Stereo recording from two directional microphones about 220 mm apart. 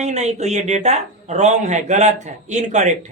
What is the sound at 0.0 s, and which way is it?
Speech, 30° right (ahead or behind).